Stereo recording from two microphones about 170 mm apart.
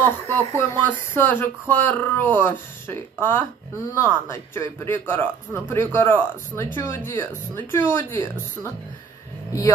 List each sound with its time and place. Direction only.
0.0 s speech: 15° left (ahead or behind)
9.5 s speech: 20° left (ahead or behind)